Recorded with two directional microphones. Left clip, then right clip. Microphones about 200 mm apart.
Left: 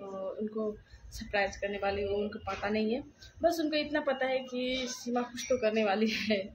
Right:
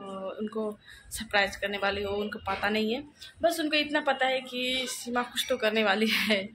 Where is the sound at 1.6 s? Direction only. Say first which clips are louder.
Right 3 dB; centre (ahead or behind).